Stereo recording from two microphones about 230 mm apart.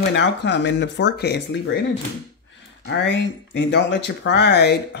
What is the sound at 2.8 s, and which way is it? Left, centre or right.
Speech, left.